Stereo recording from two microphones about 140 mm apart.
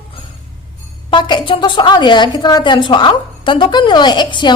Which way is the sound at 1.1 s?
35° left (ahead or behind).